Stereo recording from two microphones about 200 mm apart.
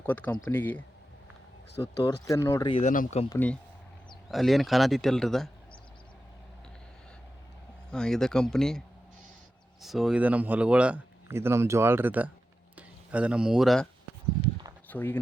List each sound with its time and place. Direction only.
0.0 s speech: 10° left (ahead or behind)
1.8 s speech: 20° left (ahead or behind)
2.8 s speech: 40° left (ahead or behind)
3.2 s speech: 10° left (ahead or behind)
7.9 s speech: 5° left (ahead or behind)
9.8 s speech: centre (ahead or behind)
14.8 s speech: 10° left (ahead or behind)